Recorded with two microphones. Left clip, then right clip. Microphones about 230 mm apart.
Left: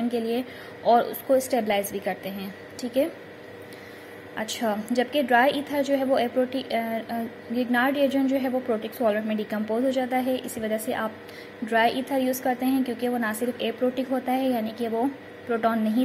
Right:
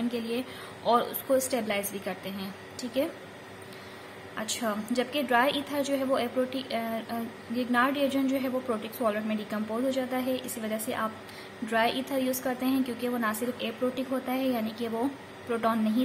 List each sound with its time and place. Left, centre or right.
0.1 s a woman's voice: centre
4.4 s a woman's voice: centre